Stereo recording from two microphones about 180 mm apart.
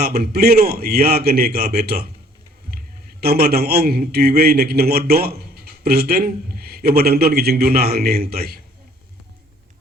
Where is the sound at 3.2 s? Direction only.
60° right (ahead or behind).